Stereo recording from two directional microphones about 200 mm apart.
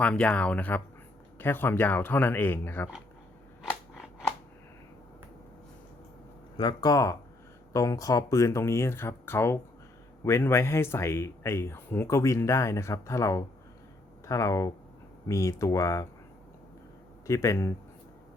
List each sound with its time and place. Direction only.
0.0 s speech: 5° left (ahead or behind)
6.6 s speech: 20° left (ahead or behind)
17.2 s speech: 15° left (ahead or behind)